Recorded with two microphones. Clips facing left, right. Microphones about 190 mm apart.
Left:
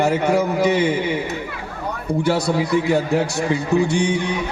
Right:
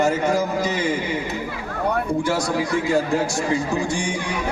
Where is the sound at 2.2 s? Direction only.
60° left (ahead or behind).